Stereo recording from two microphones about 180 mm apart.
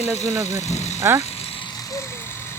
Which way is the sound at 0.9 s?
15° right (ahead or behind).